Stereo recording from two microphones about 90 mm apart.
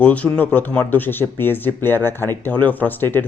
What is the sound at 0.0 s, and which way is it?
Speech, 15° left (ahead or behind).